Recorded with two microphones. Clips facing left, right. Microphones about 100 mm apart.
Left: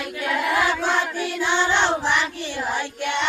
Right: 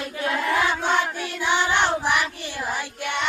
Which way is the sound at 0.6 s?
15° right (ahead or behind).